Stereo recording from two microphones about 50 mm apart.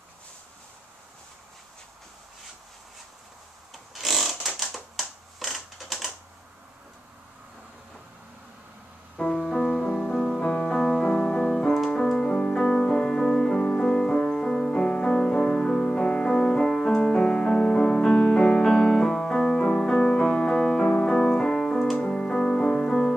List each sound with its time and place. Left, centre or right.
3.7 s wood: centre
4.6 s typewriter: centre
9.2 s music: centre
13.6 s music: centre